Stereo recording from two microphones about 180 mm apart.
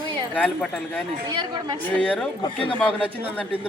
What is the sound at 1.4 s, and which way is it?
Speech, 25° right (ahead or behind).